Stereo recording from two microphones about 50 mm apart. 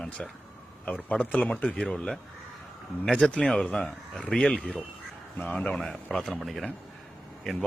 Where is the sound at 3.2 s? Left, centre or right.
Left.